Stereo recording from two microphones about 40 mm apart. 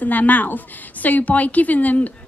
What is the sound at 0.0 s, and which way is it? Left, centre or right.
A woman's voice, left.